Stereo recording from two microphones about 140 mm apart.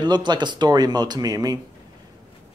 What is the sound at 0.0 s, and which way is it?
Speech, 30° right (ahead or behind).